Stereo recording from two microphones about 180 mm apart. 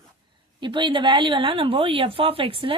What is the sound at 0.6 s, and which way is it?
Speech, 25° right (ahead or behind).